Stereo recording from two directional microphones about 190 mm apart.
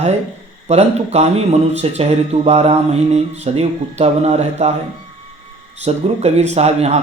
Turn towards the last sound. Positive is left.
turn(degrees=-35)  # may be behind; listen again after turning